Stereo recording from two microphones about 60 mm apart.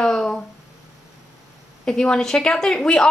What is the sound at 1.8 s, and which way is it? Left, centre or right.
Speech, centre.